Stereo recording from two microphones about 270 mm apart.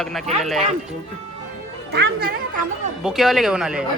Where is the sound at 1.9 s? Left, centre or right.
Right.